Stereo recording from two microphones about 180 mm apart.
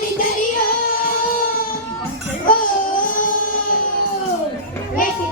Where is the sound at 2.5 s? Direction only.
50° left (ahead or behind).